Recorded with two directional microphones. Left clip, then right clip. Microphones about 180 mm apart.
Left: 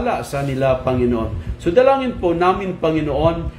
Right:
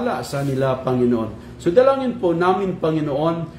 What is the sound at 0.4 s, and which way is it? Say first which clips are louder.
Speech: left 1 dB; 15° left (ahead or behind).